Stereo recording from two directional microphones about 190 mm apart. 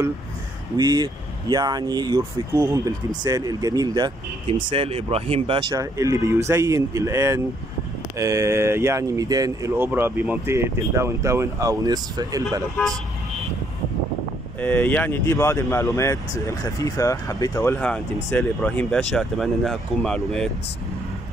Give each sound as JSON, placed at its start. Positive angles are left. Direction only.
{"t": 0.7, "sound": "speech", "side_deg": -20}
{"t": 14.6, "sound": "speech", "side_deg": 10}
{"t": 17.7, "sound": "speech", "side_deg": 5}